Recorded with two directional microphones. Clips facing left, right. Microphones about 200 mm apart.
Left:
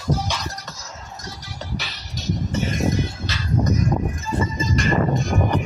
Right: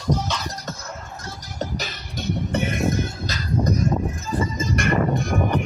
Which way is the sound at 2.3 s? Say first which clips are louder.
Even; 60° right (ahead or behind).